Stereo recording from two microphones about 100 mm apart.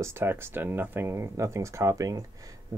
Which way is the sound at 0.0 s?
25° right (ahead or behind).